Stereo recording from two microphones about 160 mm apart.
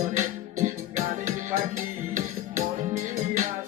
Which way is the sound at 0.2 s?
50° right (ahead or behind).